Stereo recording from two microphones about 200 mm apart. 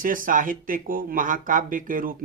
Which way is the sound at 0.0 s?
45° right (ahead or behind).